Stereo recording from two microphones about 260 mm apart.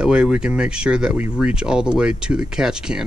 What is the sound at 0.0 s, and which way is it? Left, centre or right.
Speech, centre.